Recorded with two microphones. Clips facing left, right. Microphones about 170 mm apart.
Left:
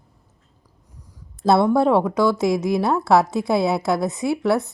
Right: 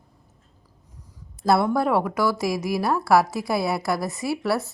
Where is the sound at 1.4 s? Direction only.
25° left (ahead or behind).